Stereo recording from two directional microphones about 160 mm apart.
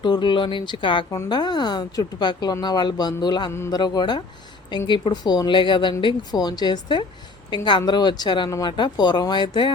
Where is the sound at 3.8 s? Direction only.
25° left (ahead or behind).